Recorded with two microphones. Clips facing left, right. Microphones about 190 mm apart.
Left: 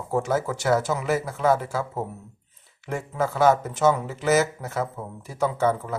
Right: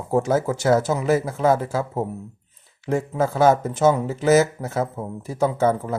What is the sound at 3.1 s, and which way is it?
Speech, 25° right (ahead or behind).